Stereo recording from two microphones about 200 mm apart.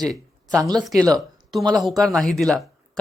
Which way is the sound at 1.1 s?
Centre (ahead or behind).